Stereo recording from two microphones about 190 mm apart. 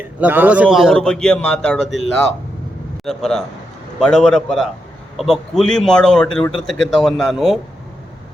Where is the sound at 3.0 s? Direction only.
Centre (ahead or behind).